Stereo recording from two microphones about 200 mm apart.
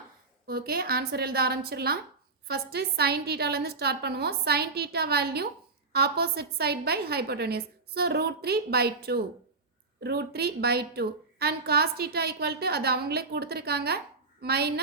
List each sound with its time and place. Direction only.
0.4 s a woman's voice: 50° right (ahead or behind)